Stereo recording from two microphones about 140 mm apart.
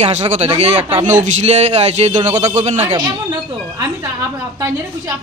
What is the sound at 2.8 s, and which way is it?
Speech, 35° right (ahead or behind).